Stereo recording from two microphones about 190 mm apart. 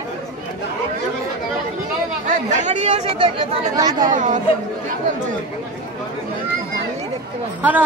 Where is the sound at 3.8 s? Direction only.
20° right (ahead or behind).